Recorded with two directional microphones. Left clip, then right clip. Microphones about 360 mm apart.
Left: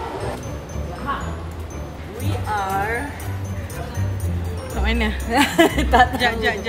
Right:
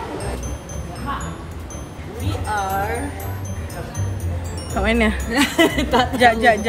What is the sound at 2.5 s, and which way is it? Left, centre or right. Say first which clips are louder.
Music: right 1 dB; centre.